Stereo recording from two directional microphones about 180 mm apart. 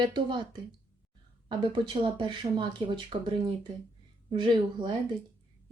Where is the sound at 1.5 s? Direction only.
25° right (ahead or behind).